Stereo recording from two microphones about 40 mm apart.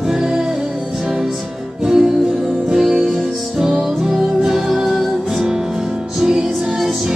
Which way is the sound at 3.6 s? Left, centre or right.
Centre.